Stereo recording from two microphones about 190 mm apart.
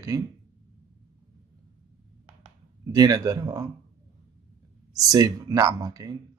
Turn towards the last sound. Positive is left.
turn(degrees=-20)  # may be behind; listen again after turning